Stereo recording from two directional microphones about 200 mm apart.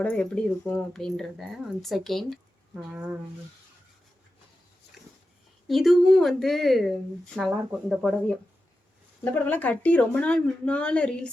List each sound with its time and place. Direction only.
0.0 s speech: 5° left (ahead or behind)
5.6 s speech: centre (ahead or behind)